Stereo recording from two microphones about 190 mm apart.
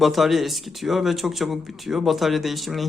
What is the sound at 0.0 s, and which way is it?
Speech, centre (ahead or behind).